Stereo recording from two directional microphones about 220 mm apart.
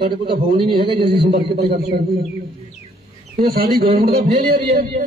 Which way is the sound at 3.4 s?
45° right (ahead or behind).